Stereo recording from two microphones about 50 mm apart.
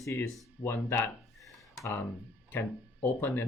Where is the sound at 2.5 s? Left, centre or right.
Left.